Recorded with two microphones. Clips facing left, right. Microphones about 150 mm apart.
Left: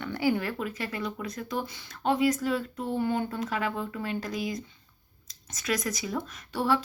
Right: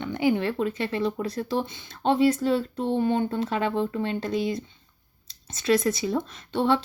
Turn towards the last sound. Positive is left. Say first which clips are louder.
# right 4 dB
turn(degrees=-25)  # may be behind; listen again after turning